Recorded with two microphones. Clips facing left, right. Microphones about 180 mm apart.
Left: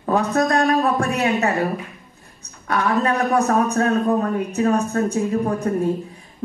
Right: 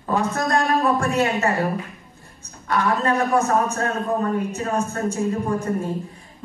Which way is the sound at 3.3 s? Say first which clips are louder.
Left 2 dB; 65° left (ahead or behind).